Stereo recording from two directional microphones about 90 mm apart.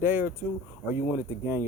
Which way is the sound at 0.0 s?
20° right (ahead or behind).